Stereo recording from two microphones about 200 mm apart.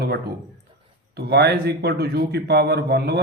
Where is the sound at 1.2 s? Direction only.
55° right (ahead or behind).